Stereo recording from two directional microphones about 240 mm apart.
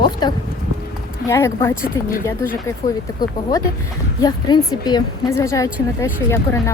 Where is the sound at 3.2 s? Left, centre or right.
Centre.